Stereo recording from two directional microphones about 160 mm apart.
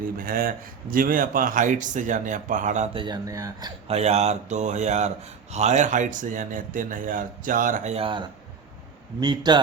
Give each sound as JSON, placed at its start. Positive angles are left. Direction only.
{"t": 0.2, "sound": "speech", "side_deg": -65}
{"t": 2.9, "sound": "speech", "side_deg": -30}
{"t": 3.8, "sound": "speech", "side_deg": -40}
{"t": 7.9, "sound": "speech", "side_deg": -35}
{"t": 9.2, "sound": "speech", "side_deg": -25}